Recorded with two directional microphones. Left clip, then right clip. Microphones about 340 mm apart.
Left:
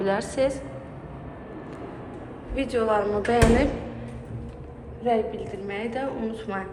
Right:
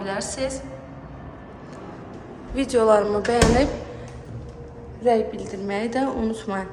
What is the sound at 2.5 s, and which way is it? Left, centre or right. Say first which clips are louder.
A woman's voice: right 6 dB; centre.